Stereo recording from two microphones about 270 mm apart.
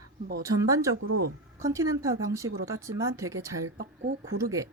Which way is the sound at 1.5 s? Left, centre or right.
Centre.